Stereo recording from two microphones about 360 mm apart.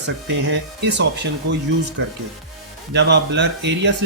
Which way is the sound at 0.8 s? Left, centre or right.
Right.